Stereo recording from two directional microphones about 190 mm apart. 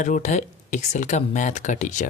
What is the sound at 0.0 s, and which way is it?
Speech, 40° left (ahead or behind).